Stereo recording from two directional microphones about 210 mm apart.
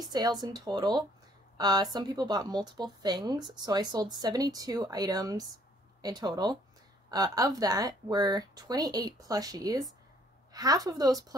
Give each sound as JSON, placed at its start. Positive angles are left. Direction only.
{"t": 0.0, "sound": "a woman's voice", "side_deg": -20}